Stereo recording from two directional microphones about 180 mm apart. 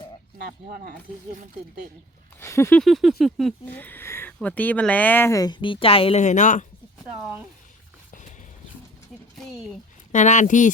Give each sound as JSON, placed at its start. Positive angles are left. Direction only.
{"t": 0.3, "sound": "speech", "side_deg": -60}
{"t": 2.4, "sound": "speech", "side_deg": 15}
{"t": 2.8, "sound": "a sound", "side_deg": 0}
{"t": 3.7, "sound": "speech", "side_deg": 10}
{"t": 10.1, "sound": "speech", "side_deg": 40}